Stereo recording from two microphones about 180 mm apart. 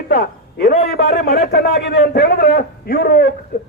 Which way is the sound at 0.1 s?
60° left (ahead or behind).